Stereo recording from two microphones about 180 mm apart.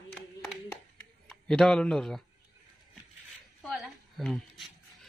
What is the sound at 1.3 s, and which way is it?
Speech, 5° left (ahead or behind).